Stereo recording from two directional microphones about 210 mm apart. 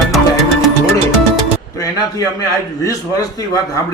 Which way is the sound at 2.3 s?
15° left (ahead or behind).